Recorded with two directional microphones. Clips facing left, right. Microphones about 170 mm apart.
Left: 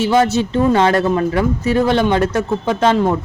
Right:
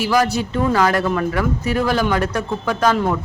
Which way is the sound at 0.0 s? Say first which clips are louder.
Left 4 dB; 25° left (ahead or behind).